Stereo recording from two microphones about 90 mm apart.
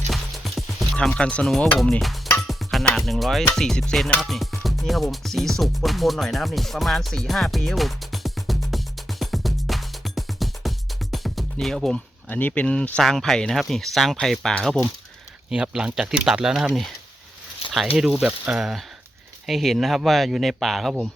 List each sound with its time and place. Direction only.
0.1 s music: centre (ahead or behind)
1.8 s speech: centre (ahead or behind)
4.2 s music: centre (ahead or behind)
11.5 s speech: 5° left (ahead or behind)
12.3 s speech: 20° left (ahead or behind)
15.4 s speech: 10° right (ahead or behind)
17.6 s a sound: 90° left
18.2 s speech: 15° right (ahead or behind)
19.5 s speech: centre (ahead or behind)